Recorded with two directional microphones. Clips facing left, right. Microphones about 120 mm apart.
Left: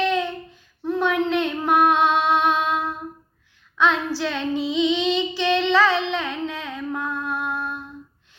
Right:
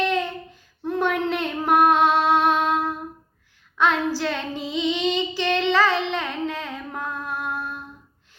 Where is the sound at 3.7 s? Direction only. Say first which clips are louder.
Even; 45° right (ahead or behind).